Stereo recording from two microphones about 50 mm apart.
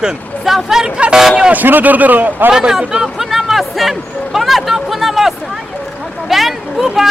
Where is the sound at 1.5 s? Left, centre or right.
Right.